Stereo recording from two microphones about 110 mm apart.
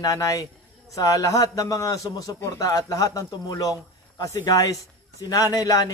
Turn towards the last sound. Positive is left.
turn(degrees=35)  # may be behind; listen again after turning